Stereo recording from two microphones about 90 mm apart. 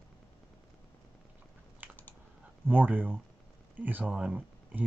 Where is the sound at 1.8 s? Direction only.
20° right (ahead or behind).